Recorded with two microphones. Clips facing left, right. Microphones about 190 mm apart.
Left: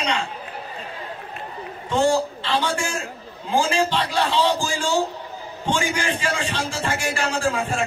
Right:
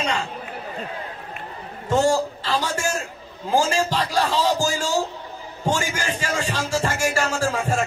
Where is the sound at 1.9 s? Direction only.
40° right (ahead or behind).